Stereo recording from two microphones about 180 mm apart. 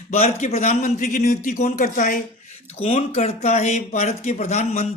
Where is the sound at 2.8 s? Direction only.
35° left (ahead or behind).